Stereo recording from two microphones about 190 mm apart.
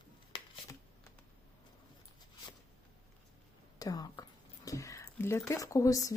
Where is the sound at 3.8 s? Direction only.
20° left (ahead or behind).